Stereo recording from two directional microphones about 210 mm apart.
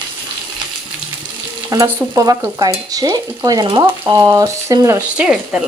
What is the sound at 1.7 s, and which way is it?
Stir, 15° right (ahead or behind).